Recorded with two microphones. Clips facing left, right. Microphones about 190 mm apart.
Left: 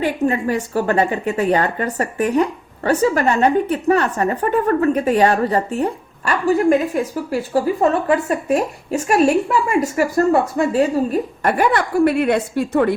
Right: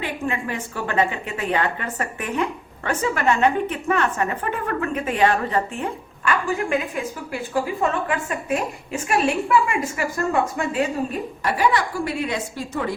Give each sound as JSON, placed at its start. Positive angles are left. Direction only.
{"t": 0.0, "sound": "a woman's voice", "side_deg": 40}